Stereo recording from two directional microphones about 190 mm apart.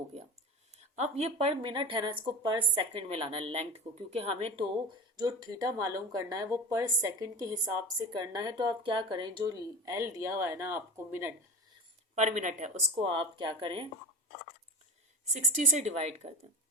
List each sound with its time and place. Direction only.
0.9 s a woman's voice: 35° right (ahead or behind); by 11.3 s 15° right (ahead or behind)
12.1 s a woman's voice: 40° right (ahead or behind)
13.1 s a woman's voice: 25° right (ahead or behind)
15.3 s a woman's voice: 40° right (ahead or behind)